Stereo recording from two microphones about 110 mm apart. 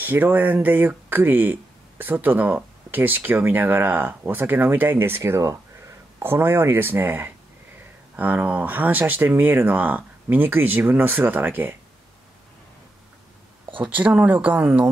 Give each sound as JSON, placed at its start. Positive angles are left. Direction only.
{"t": 0.0, "sound": "speech", "side_deg": -20}
{"t": 13.7, "sound": "speech", "side_deg": -15}